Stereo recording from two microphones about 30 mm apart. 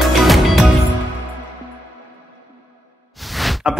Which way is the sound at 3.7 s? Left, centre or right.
Right.